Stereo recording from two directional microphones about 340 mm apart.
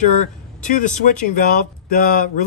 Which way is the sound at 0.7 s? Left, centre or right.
Left.